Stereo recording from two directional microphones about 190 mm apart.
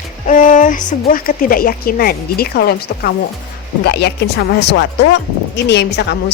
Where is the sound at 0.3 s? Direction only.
45° left (ahead or behind).